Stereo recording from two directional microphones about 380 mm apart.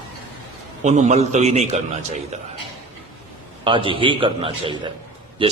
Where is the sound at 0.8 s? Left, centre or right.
Centre.